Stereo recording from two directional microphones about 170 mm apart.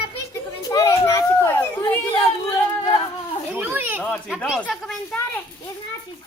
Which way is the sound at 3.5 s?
15° right (ahead or behind).